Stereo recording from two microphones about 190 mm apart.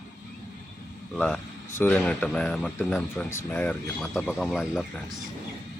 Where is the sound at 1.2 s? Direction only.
10° left (ahead or behind).